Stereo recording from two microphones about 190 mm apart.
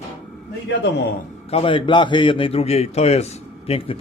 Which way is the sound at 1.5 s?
30° left (ahead or behind).